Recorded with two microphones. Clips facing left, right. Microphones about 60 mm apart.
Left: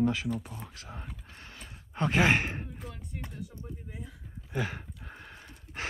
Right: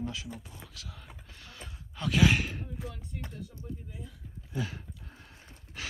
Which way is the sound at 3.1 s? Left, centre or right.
Left.